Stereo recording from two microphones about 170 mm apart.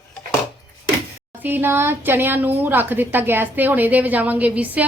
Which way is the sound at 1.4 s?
10° right (ahead or behind).